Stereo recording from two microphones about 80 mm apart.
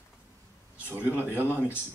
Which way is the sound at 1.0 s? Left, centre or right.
Left.